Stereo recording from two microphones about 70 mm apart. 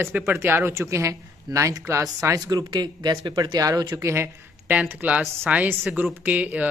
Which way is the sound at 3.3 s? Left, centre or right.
Right.